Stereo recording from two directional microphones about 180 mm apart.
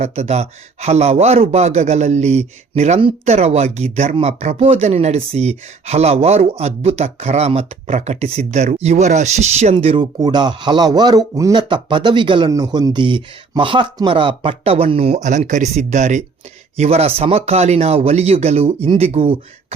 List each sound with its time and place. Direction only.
0.0 s speech: 35° right (ahead or behind)